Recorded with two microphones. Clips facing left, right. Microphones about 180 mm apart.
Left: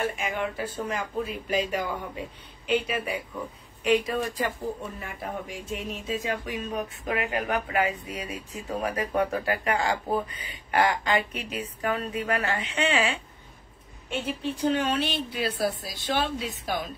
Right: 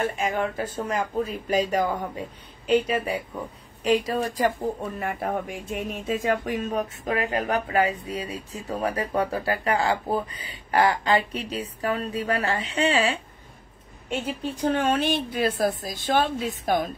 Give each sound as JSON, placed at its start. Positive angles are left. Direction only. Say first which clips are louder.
{"t": 0.0, "sound": "speech", "louder": "right 3 dB", "side_deg": -45}
{"t": 4.9, "sound": "speech", "louder": "right 7 dB", "side_deg": -60}
{"t": 14.2, "sound": "speech", "louder": "even", "side_deg": -45}